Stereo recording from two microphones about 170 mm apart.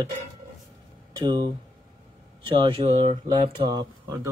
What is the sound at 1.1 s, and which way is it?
Speech, 25° right (ahead or behind).